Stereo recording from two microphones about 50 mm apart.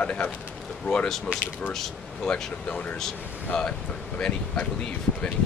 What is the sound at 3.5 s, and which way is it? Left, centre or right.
Speech, centre.